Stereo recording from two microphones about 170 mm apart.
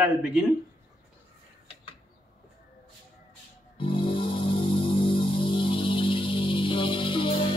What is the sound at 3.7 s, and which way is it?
Music, 30° left (ahead or behind).